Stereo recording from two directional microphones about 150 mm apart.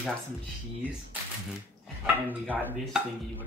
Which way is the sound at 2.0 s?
10° right (ahead or behind).